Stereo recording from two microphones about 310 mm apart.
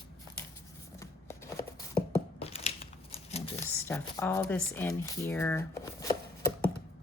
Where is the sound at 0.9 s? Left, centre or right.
Centre.